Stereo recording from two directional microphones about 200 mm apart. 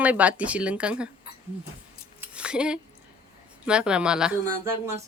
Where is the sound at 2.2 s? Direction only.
5° right (ahead or behind).